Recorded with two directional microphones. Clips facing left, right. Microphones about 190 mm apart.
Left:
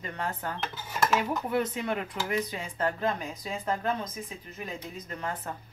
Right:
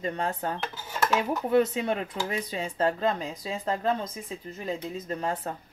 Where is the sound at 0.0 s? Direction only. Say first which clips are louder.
Right 5 dB; 25° right (ahead or behind).